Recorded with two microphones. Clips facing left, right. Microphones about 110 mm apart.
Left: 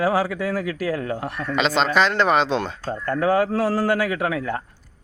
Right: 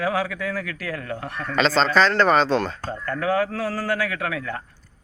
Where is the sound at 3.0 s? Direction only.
30° left (ahead or behind).